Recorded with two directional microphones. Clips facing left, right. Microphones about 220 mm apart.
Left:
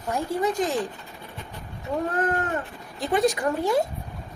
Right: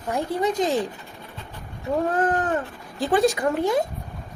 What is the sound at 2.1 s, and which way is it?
Speech, 30° right (ahead or behind).